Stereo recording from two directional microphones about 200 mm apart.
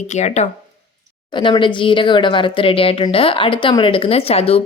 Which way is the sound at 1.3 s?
25° left (ahead or behind).